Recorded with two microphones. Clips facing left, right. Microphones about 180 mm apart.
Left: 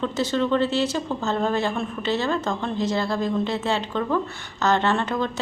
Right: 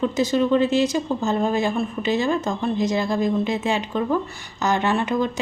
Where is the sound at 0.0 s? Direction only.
10° right (ahead or behind).